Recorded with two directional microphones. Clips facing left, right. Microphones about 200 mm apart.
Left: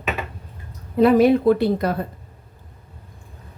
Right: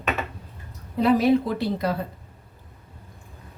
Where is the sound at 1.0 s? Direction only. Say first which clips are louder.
Left 5 dB; 55° left (ahead or behind).